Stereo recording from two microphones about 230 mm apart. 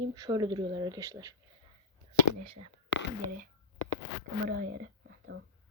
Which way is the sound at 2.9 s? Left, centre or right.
Left.